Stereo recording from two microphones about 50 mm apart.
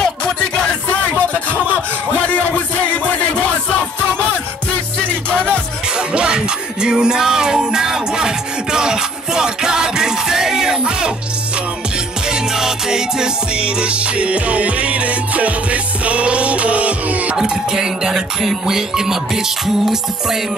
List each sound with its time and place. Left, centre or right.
0.0 s music: centre
1.3 s a sound: left
5.0 s music: left
5.9 s music: centre
12.3 s music: centre; by 17.4 s right
17.4 s music: centre